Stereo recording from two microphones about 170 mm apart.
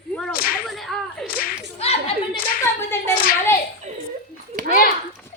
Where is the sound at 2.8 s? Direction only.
15° left (ahead or behind).